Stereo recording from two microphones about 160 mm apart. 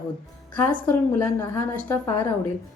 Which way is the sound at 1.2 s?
15° left (ahead or behind).